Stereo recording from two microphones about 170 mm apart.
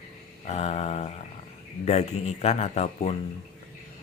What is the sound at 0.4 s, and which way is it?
Speech, 40° left (ahead or behind).